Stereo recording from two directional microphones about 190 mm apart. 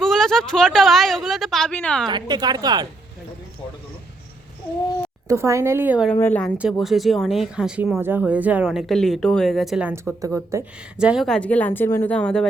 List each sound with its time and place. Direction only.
0.0 s a woman's voice: centre (ahead or behind)
2.0 s a woman's voice: 25° right (ahead or behind)
5.3 s a woman's voice: 15° right (ahead or behind)
6.1 s speech: 10° left (ahead or behind)
6.6 s a woman's voice: centre (ahead or behind)
10.9 s speech: 5° right (ahead or behind)